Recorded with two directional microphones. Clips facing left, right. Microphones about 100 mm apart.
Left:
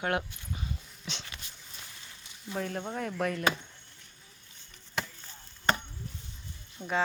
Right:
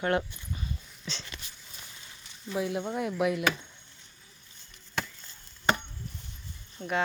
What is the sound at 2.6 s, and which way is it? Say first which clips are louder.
Speech: right 4 dB; 10° right (ahead or behind).